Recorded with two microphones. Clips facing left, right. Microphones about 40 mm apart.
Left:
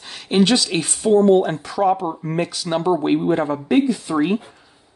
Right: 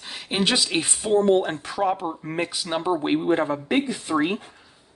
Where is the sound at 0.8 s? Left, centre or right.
Right.